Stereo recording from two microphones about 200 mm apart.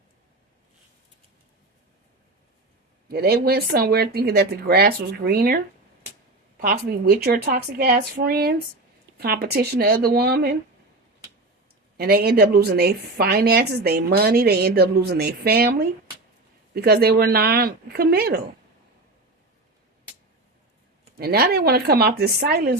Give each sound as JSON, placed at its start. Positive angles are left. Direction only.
{"t": 3.1, "sound": "a woman's voice", "side_deg": -50}
{"t": 6.6, "sound": "a woman's voice", "side_deg": -50}
{"t": 11.9, "sound": "a woman's voice", "side_deg": -50}
{"t": 21.2, "sound": "a woman's voice", "side_deg": -50}